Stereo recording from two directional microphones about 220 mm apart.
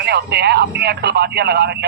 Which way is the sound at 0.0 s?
50° right (ahead or behind).